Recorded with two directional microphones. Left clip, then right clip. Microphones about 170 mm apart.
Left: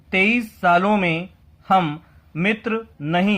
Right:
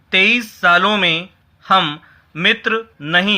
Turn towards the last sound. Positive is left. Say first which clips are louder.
# right 6 dB
turn(degrees=-15)  # may be behind; listen again after turning